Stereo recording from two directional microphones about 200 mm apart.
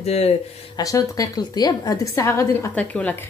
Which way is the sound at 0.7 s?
15° left (ahead or behind).